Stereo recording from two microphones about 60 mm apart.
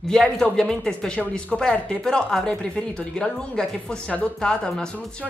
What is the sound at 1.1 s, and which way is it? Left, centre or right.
Speech, left.